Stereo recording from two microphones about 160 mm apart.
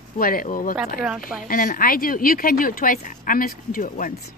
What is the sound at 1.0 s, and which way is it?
Speech, 5° right (ahead or behind).